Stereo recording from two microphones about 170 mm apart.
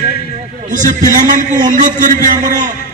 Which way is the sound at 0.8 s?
50° right (ahead or behind).